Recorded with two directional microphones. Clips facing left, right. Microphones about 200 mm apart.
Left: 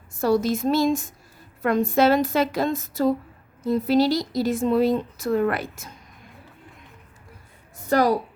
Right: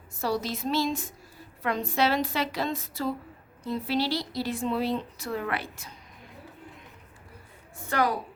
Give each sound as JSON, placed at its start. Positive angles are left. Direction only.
{"t": 0.2, "sound": "a woman's voice", "side_deg": 50}
{"t": 7.9, "sound": "a woman's voice", "side_deg": 40}